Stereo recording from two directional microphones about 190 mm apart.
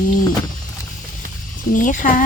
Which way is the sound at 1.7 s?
45° left (ahead or behind).